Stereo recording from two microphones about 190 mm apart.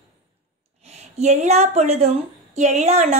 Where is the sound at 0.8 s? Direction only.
35° right (ahead or behind).